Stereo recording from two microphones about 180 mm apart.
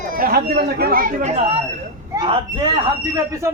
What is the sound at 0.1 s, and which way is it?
Speech, 55° right (ahead or behind).